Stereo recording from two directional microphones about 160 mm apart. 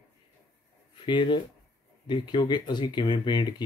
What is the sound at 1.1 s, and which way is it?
Speech, 30° left (ahead or behind).